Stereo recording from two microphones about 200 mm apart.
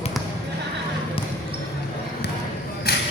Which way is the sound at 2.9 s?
50° left (ahead or behind).